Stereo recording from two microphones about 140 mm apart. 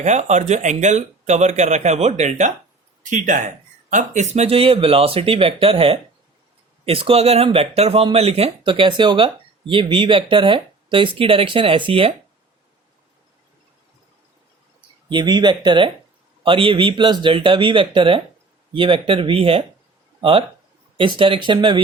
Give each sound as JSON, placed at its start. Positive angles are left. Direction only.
{"t": 0.0, "sound": "speech", "side_deg": -55}
{"t": 15.1, "sound": "speech", "side_deg": -30}
{"t": 21.0, "sound": "speech", "side_deg": -35}